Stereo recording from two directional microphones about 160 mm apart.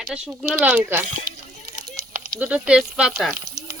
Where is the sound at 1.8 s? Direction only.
20° right (ahead or behind).